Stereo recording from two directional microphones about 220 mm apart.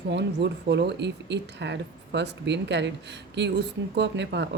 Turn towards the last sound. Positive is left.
turn(degrees=-55)  # may be behind; listen again after turning